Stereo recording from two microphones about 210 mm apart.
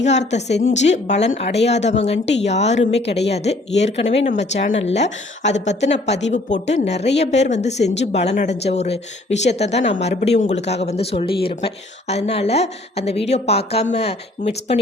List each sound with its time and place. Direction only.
0.4 s speech: 55° left (ahead or behind)
0.7 s a woman's voice: 35° left (ahead or behind)